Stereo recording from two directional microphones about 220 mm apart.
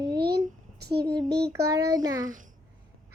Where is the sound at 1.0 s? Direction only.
20° right (ahead or behind).